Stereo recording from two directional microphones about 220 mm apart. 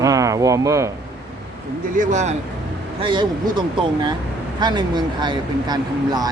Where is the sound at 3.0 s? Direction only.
20° right (ahead or behind).